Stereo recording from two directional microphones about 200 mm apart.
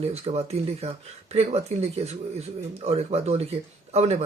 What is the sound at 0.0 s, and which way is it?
Speech, 30° right (ahead or behind).